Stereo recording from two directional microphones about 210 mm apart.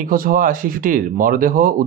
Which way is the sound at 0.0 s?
40° right (ahead or behind).